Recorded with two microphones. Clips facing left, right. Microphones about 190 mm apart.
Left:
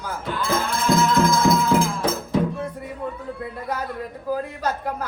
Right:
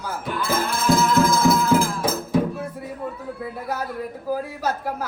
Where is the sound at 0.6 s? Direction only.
5° right (ahead or behind).